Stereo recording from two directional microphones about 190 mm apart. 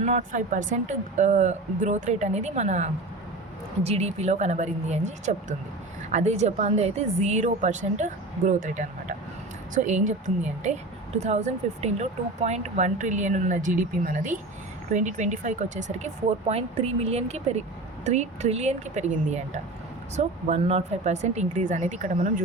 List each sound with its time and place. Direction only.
0.0 s speech: 40° right (ahead or behind)